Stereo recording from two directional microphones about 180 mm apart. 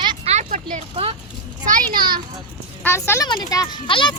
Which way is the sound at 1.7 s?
55° right (ahead or behind).